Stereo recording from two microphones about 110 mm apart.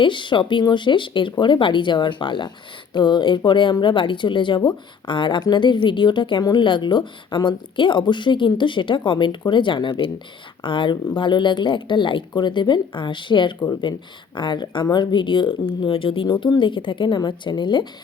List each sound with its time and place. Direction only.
0.0 s a woman's voice: 45° left (ahead or behind)